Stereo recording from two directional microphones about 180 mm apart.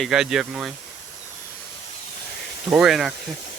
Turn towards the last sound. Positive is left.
turn(degrees=0)  # may be behind; listen again after turning